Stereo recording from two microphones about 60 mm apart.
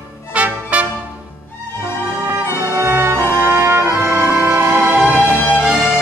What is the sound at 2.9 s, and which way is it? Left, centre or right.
Music, right.